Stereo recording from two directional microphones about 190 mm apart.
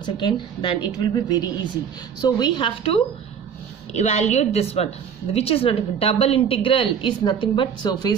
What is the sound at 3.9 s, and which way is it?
A woman's voice, 35° left (ahead or behind).